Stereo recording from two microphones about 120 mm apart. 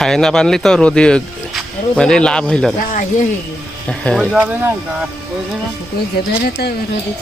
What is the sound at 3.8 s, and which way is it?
Speech, 5° left (ahead or behind).